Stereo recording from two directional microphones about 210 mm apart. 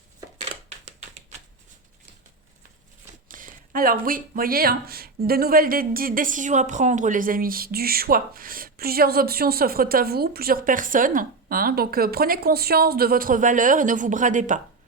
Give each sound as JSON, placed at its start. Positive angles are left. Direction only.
{"t": 3.2, "sound": "speech", "side_deg": -40}